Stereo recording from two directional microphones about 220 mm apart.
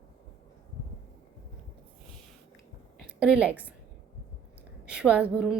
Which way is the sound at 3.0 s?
5° right (ahead or behind).